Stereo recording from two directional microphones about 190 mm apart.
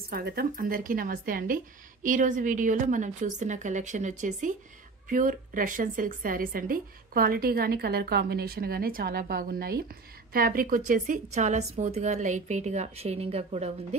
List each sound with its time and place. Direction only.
0.1 s a woman's voice: 55° right (ahead or behind); by 13.7 s 35° right (ahead or behind)